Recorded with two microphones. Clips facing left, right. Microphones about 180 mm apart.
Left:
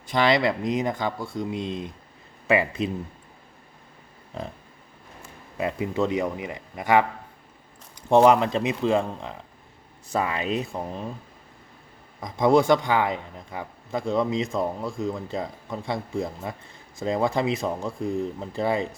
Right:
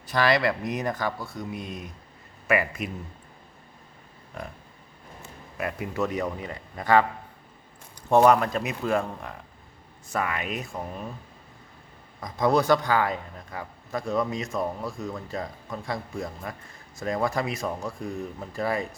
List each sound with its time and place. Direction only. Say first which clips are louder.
0.1 s a man's voice: left 2 dB; 20° left (ahead or behind)
5.5 s a man's voice: left 4 dB; 20° left (ahead or behind)
8.1 s a man's voice: left 2 dB; 20° left (ahead or behind)
12.2 s a man's voice: left 4 dB; 25° left (ahead or behind)